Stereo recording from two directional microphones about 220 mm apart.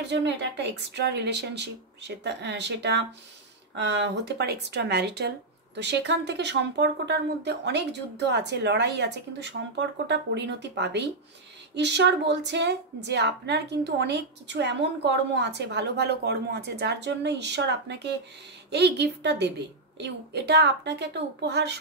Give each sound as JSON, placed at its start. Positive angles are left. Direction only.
{"t": 0.0, "sound": "a woman's voice", "side_deg": -50}